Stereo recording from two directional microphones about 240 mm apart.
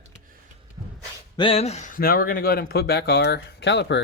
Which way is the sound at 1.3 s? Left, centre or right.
Left.